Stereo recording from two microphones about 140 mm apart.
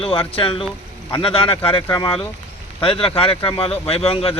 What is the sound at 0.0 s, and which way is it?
Speech, 40° left (ahead or behind).